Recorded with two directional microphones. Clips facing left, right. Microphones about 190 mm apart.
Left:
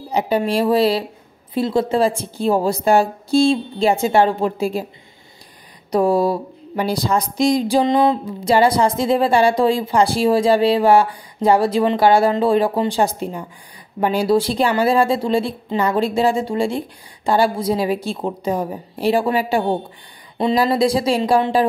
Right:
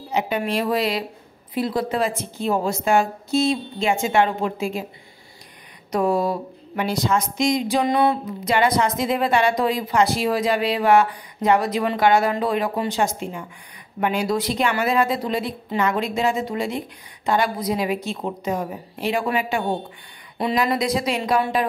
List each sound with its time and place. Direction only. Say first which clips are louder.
0.1 s speech: left 4 dB; 35° left (ahead or behind)
5.9 s speech: left 4 dB; 35° left (ahead or behind)